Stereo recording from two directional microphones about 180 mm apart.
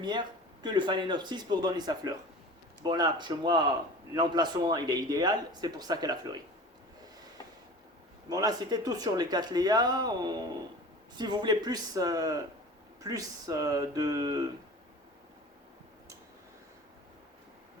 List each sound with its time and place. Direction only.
0.0 s speech: 25° right (ahead or behind)
8.3 s speech: 20° right (ahead or behind)